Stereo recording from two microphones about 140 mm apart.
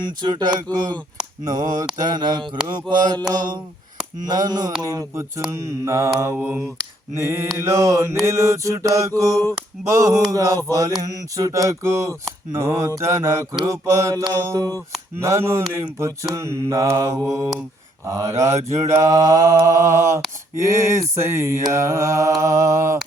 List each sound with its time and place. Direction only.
0.0 s speech: 30° right (ahead or behind)
1.5 s mantra: 25° right (ahead or behind)
2.0 s speech: 30° right (ahead or behind)
3.2 s mantra: 30° right (ahead or behind)